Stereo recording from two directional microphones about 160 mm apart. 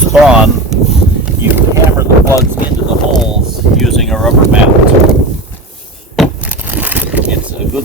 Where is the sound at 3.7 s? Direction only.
Centre (ahead or behind).